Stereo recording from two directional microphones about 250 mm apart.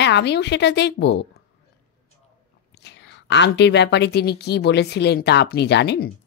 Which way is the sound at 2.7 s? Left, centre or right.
Left.